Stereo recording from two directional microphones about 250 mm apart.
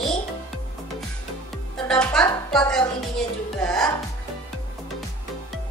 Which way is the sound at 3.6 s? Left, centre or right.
Centre.